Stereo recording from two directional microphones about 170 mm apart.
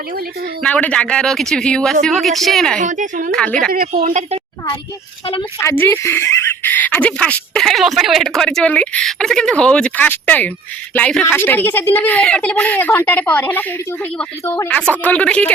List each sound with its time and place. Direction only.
0.6 s speech: 10° left (ahead or behind)
2.8 s speech: 45° right (ahead or behind)
3.7 s a woman's voice: 60° right (ahead or behind)
5.2 s speech: 30° left (ahead or behind)
5.5 s speech: 15° left (ahead or behind)